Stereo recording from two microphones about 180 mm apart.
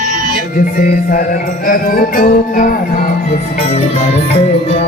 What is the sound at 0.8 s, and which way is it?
Music, 50° left (ahead or behind).